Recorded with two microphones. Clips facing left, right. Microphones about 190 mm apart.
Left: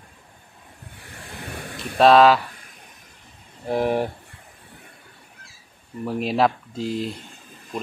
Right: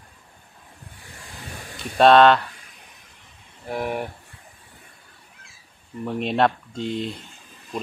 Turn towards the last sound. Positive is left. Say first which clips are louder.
# left 1 dB
turn(degrees=0)  # may be behind; listen again after turning